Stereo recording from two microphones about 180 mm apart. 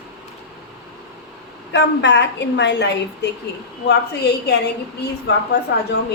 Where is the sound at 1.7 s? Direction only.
75° left (ahead or behind).